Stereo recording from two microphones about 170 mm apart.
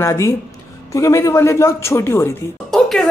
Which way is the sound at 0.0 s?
15° left (ahead or behind).